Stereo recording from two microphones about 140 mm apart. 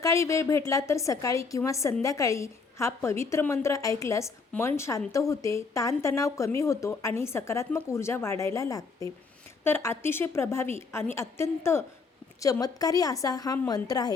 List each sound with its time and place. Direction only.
0.0 s a woman's voice: 20° left (ahead or behind)